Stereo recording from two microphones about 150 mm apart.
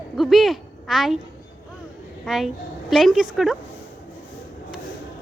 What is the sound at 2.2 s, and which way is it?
Speech, centre (ahead or behind).